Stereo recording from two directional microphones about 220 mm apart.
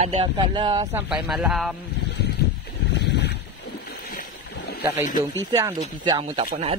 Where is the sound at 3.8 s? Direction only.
45° left (ahead or behind).